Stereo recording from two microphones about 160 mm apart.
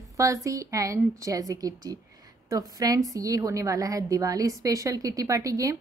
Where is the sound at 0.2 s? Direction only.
20° right (ahead or behind).